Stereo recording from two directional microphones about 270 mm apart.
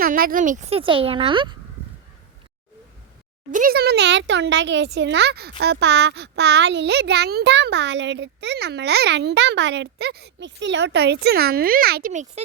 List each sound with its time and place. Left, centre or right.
0.0 s speech: right
3.5 s speech: right